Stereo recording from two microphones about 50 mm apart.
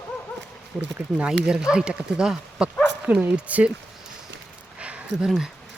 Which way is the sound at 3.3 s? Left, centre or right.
Right.